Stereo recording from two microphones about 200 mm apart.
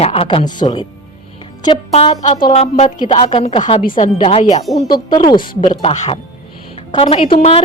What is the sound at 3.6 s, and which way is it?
Speech, 35° left (ahead or behind).